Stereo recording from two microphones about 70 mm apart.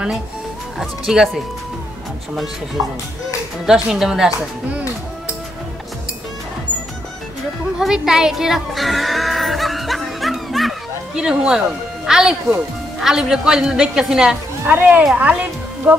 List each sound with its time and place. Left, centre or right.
0.7 s speech: centre
2.8 s a woman's voice: centre
7.8 s a sound: centre
11.1 s a woman's voice: centre
14.7 s a woman's voice: right